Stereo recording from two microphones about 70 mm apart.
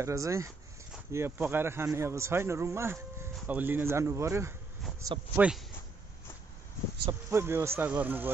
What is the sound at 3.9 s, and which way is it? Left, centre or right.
Speech, right.